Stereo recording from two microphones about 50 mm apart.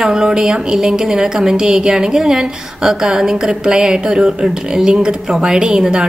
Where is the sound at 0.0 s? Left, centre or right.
Centre.